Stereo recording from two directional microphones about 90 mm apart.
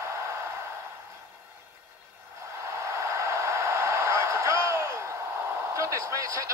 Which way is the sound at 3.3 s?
30° right (ahead or behind).